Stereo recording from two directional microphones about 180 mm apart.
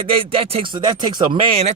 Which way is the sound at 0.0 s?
30° right (ahead or behind).